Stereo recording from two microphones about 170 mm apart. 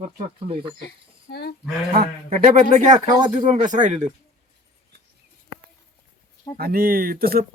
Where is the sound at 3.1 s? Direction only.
25° right (ahead or behind).